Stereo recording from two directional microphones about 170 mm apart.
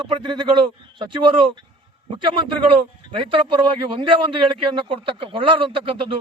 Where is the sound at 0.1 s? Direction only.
25° right (ahead or behind).